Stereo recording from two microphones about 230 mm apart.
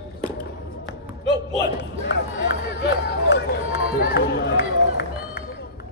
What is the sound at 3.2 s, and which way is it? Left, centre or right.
Run, left.